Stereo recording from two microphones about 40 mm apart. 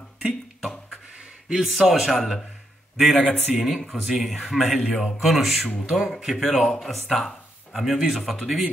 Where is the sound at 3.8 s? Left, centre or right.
Centre.